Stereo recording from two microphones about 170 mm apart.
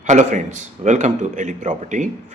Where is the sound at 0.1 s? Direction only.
45° right (ahead or behind).